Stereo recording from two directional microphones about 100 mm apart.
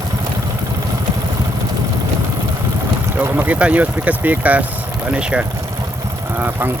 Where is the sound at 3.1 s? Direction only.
20° right (ahead or behind).